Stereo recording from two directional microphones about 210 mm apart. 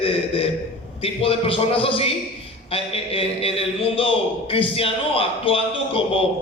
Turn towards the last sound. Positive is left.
turn(degrees=25)  # may be behind; listen again after turning